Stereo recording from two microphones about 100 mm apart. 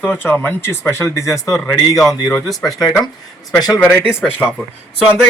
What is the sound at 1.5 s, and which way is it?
Speech, centre (ahead or behind).